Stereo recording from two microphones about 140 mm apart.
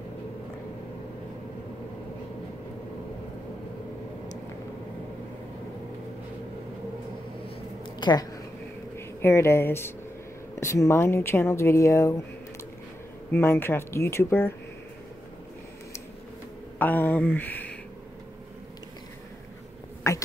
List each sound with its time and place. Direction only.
8.0 s speech: 30° left (ahead or behind)
8.9 s speech: 20° left (ahead or behind)
13.3 s speech: 15° left (ahead or behind)
16.7 s speech: 15° left (ahead or behind)
20.1 s a sound: 25° left (ahead or behind)